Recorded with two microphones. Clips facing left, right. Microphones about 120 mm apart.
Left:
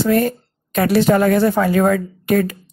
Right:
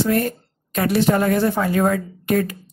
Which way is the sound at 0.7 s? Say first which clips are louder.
Left 4 dB; 90° left.